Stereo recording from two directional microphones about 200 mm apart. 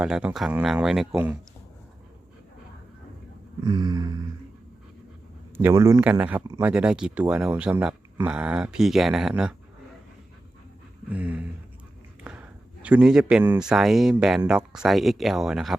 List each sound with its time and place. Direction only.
0.0 s speech: 5° right (ahead or behind)
3.6 s a sound: 20° right (ahead or behind)
5.5 s speech: 10° right (ahead or behind)
11.1 s speech: 5° right (ahead or behind)